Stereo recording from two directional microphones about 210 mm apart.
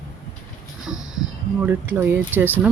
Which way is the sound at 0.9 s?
65° right (ahead or behind).